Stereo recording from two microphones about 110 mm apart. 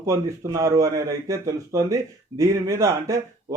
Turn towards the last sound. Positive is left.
turn(degrees=-30)  # may be behind; listen again after turning